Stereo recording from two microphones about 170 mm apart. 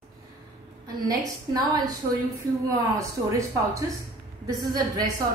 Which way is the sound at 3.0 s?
20° right (ahead or behind).